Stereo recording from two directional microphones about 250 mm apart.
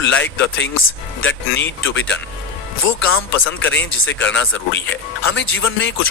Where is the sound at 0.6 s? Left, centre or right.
Left.